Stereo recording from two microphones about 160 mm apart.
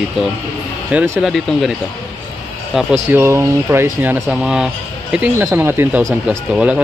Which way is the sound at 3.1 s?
15° right (ahead or behind).